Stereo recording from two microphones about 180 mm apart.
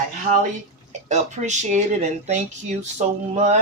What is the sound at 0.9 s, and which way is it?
Speech, 40° right (ahead or behind).